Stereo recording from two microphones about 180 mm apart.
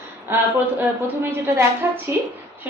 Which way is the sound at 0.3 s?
15° right (ahead or behind).